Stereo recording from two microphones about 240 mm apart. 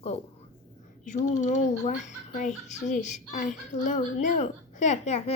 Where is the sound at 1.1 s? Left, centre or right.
Left.